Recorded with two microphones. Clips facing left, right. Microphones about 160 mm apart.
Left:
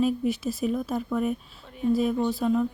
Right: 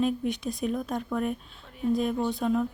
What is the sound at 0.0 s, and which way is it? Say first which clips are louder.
A woman's voice: left 3 dB; 5° left (ahead or behind).